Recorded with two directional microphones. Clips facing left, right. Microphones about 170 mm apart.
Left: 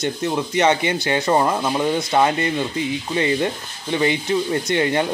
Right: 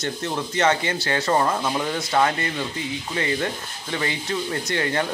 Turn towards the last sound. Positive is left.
turn(degrees=20)  # may be behind; listen again after turning